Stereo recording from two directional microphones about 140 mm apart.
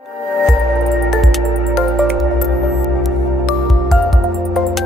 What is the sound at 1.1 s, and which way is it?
Music, centre (ahead or behind).